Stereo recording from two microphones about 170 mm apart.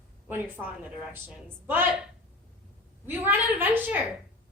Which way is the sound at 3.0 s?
10° right (ahead or behind).